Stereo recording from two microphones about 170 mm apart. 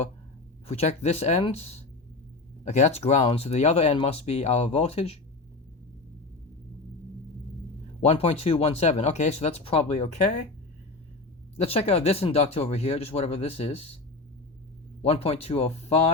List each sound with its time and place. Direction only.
0.7 s speech: 40° left (ahead or behind)
8.0 s speech: 35° left (ahead or behind)
11.5 s speech: 35° left (ahead or behind)
15.0 s speech: 35° left (ahead or behind)